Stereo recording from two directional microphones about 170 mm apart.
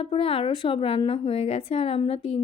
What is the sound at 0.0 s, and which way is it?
A woman's voice, 35° left (ahead or behind).